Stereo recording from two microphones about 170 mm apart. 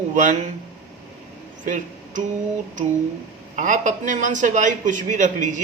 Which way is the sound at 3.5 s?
50° right (ahead or behind).